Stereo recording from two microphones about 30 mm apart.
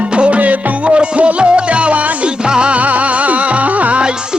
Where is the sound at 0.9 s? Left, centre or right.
Right.